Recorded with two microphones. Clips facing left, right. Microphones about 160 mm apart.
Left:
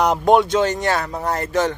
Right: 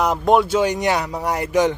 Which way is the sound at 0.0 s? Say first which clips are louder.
Left 1 dB; centre (ahead or behind).